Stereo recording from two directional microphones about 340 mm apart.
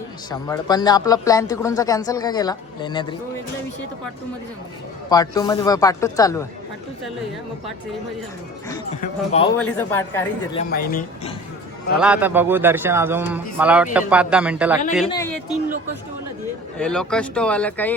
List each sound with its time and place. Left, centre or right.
0.3 s speech: centre
5.0 s speech: centre
8.7 s speech: centre
9.6 s a man's voice: centre
10.6 s speech: left
11.9 s a man's voice: centre
16.7 s a man's voice: centre